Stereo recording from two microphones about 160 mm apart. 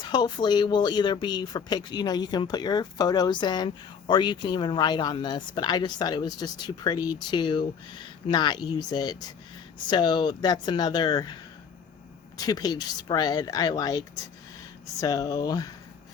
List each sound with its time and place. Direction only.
0.0 s speech: 25° left (ahead or behind)
12.4 s speech: 25° left (ahead or behind)
15.0 s speech: 20° left (ahead or behind)